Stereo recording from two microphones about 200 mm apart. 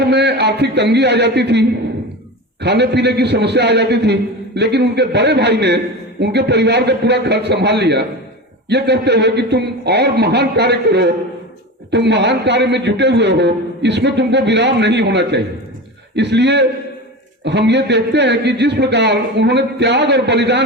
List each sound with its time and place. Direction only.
0.0 s a man's voice: 55° right (ahead or behind)